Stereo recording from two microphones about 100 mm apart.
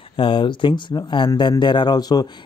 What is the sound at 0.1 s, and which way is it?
Speech, 60° left (ahead or behind).